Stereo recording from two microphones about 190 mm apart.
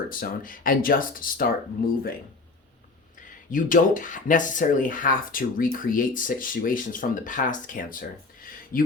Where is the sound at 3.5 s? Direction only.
45° left (ahead or behind).